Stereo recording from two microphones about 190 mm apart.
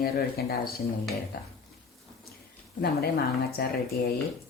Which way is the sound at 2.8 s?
55° left (ahead or behind).